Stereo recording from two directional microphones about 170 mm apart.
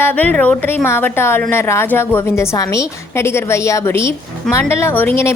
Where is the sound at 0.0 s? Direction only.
10° left (ahead or behind).